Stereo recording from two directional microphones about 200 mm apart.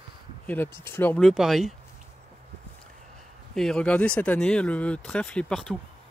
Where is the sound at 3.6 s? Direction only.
5° left (ahead or behind).